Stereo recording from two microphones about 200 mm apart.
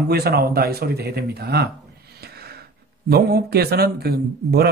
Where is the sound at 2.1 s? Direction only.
50° right (ahead or behind).